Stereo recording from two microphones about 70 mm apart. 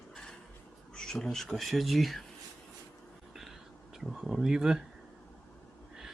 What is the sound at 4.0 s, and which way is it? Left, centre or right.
Speech, centre.